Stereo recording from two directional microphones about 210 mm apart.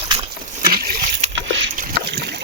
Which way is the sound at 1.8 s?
50° right (ahead or behind).